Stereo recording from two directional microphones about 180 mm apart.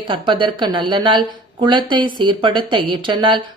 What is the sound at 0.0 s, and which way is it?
Speech, 25° right (ahead or behind).